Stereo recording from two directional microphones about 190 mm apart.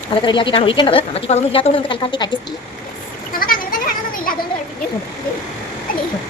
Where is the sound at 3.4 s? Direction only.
50° left (ahead or behind).